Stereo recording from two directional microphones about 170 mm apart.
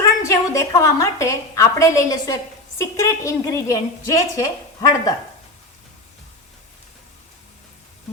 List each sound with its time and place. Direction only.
0.2 s a woman's voice: 20° left (ahead or behind)